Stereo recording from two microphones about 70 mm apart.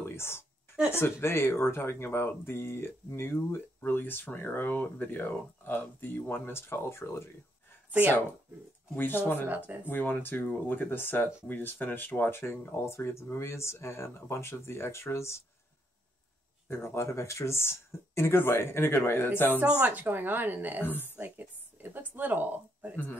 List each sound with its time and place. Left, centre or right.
0.0 s a sound: left
0.9 s speech: left
8.9 s speech: left
16.6 s speech: left
19.5 s a woman's voice: right
20.8 s speech: left
21.2 s speech: right